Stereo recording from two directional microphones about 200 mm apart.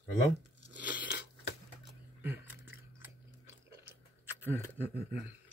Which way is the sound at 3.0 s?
10° right (ahead or behind).